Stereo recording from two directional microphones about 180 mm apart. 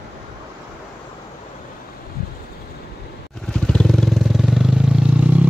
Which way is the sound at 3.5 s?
5° left (ahead or behind).